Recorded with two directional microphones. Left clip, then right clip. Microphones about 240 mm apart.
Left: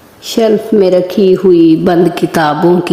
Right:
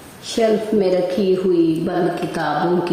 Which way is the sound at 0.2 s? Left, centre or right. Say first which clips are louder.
Left 7 dB; left.